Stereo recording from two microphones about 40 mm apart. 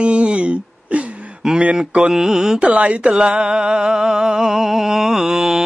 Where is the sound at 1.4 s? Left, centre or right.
Centre.